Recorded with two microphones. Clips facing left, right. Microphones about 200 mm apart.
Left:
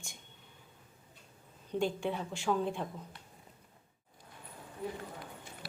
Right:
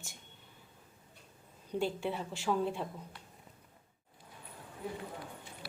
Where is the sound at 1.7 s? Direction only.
5° right (ahead or behind).